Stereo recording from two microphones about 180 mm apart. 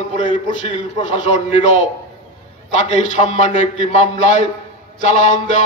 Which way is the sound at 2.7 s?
40° left (ahead or behind).